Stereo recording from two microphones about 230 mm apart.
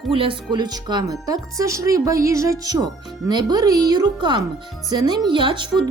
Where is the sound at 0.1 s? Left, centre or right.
Right.